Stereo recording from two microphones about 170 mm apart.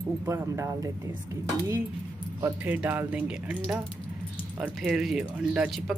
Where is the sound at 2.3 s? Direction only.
10° right (ahead or behind).